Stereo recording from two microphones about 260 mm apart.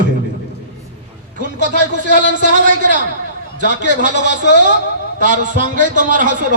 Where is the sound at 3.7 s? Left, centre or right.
Right.